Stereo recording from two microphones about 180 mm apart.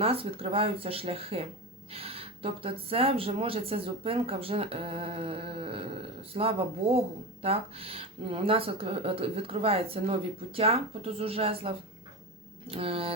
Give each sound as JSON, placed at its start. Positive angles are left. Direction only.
{"t": 0.0, "sound": "speech", "side_deg": -35}